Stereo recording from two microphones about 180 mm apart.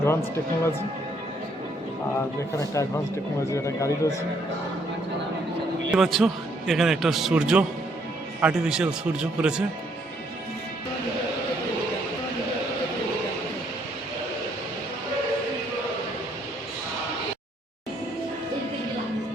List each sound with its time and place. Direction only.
0.0 s speech: 15° left (ahead or behind)
2.8 s speech: 15° left (ahead or behind)
5.9 s a man's voice: centre (ahead or behind)